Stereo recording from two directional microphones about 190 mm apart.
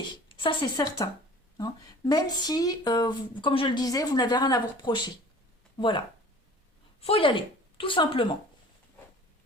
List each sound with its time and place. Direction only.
0.3 s speech: 25° left (ahead or behind)
7.0 s a woman's voice: 30° left (ahead or behind)